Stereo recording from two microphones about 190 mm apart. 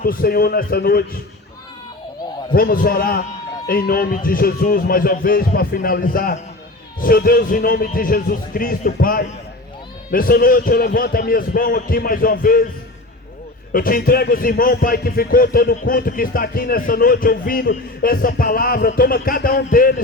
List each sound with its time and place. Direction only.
0.0 s speech: 50° left (ahead or behind)
2.6 s speech: 50° left (ahead or behind)
13.7 s speech: 50° left (ahead or behind)